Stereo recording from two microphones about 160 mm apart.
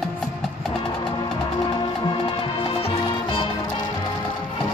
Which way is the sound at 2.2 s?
30° left (ahead or behind).